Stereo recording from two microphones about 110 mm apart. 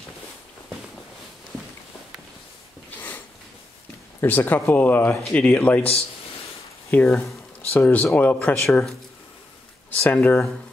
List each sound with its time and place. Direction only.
4.2 s speech: 20° left (ahead or behind)
7.1 s speech: 5° left (ahead or behind)
7.7 s speech: 15° left (ahead or behind)